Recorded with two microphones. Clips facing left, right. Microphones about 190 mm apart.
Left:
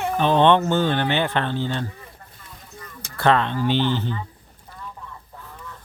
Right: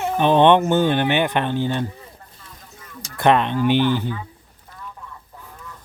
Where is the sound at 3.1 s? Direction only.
15° right (ahead or behind).